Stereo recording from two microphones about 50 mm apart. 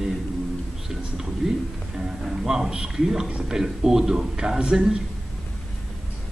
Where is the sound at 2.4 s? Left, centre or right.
Centre.